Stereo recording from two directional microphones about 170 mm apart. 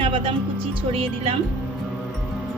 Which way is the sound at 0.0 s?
30° right (ahead or behind).